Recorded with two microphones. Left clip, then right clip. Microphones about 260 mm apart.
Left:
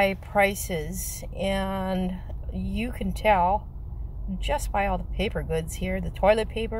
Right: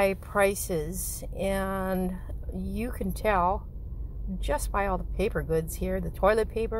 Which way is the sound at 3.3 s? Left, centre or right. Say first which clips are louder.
Left 4 dB; right.